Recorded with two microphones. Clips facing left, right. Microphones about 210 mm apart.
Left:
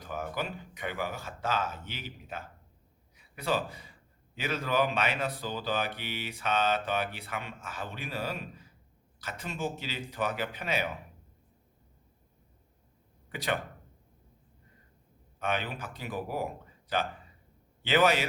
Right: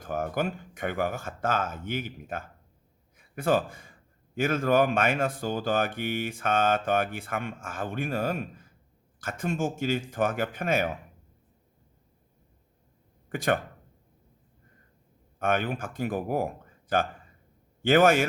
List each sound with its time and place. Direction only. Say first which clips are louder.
0.0 s a man's voice: right 6 dB; 50° right (ahead or behind)
13.3 s a man's voice: right 6 dB; 50° right (ahead or behind)
15.4 s a man's voice: right 6 dB; 50° right (ahead or behind)